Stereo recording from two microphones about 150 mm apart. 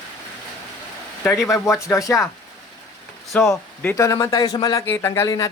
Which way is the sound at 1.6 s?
20° left (ahead or behind).